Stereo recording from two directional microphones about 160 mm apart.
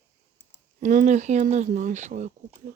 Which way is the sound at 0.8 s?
55° right (ahead or behind).